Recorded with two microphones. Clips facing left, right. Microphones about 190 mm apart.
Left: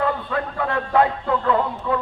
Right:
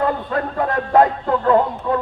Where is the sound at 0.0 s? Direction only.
45° right (ahead or behind).